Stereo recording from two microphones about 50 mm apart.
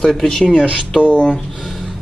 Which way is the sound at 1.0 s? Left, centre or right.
Left.